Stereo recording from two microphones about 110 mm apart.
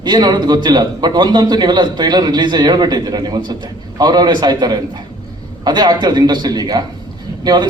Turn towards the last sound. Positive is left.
turn(degrees=-40)  # may be behind; listen again after turning